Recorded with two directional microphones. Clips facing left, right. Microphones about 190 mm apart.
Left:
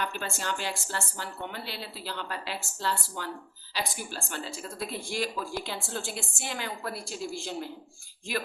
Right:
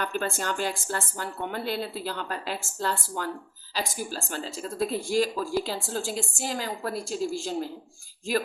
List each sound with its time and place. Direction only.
0.0 s a woman's voice: 45° right (ahead or behind)